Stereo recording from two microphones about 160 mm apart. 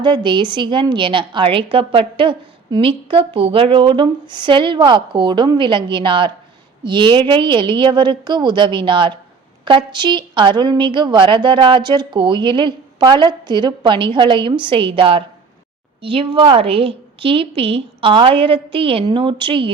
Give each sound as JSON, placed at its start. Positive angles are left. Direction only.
{"t": 0.0, "sound": "a woman's voice", "side_deg": -30}